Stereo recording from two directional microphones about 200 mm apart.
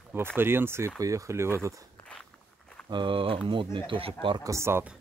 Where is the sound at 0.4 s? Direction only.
10° right (ahead or behind).